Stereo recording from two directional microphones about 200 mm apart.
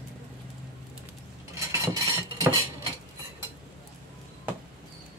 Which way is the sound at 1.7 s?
15° right (ahead or behind).